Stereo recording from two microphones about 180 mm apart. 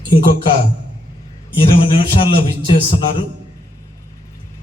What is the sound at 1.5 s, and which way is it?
A man's voice, 30° left (ahead or behind).